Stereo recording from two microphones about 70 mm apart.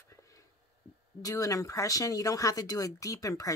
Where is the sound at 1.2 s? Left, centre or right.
Left.